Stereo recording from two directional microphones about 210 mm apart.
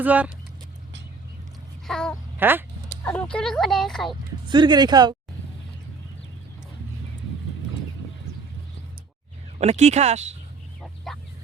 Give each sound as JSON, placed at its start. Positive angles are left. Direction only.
{"t": 0.0, "sound": "speech", "side_deg": -5}
{"t": 1.9, "sound": "a sound", "side_deg": 5}
{"t": 2.4, "sound": "speech", "side_deg": -10}
{"t": 3.0, "sound": "speech", "side_deg": 5}
{"t": 4.4, "sound": "speech", "side_deg": -20}
{"t": 9.6, "sound": "speech", "side_deg": -30}
{"t": 10.8, "sound": "fowl", "side_deg": 0}